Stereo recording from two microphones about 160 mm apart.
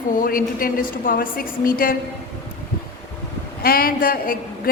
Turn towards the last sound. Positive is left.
turn(degrees=65)  # may be behind; listen again after turning